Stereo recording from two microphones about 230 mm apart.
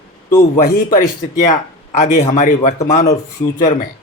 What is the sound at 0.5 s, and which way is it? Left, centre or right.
Speech, left.